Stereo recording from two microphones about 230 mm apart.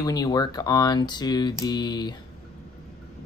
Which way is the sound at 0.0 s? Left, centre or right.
Centre.